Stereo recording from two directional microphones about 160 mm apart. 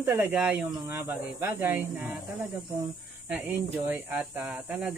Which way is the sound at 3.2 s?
10° right (ahead or behind).